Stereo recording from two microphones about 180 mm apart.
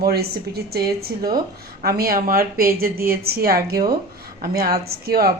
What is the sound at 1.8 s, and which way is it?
A woman's voice, 60° right (ahead or behind).